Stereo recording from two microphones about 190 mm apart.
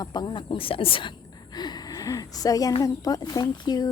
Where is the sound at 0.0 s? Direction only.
20° left (ahead or behind).